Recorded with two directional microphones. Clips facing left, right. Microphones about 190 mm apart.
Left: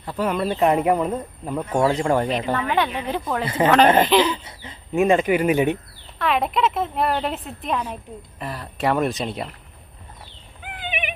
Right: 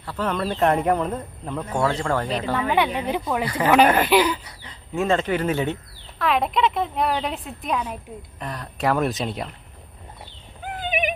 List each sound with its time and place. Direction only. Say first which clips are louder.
0.0 s speech: left 2 dB; 15° left (ahead or behind)
2.6 s speech: right 1 dB; 10° right (ahead or behind)
3.4 s speech: left 3 dB; 25° left (ahead or behind)
4.0 s speech: left 1 dB; 10° right (ahead or behind)
4.3 s speech: even; 25° left (ahead or behind)
6.1 s a woman's voice: even; centre (ahead or behind)
10.6 s a sound: right 5 dB; 40° right (ahead or behind)